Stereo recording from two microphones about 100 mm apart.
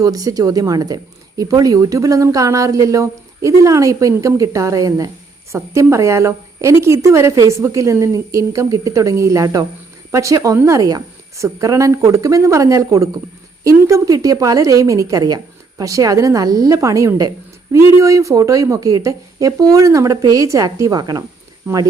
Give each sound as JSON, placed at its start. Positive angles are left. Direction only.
{"t": 0.0, "sound": "speech", "side_deg": -35}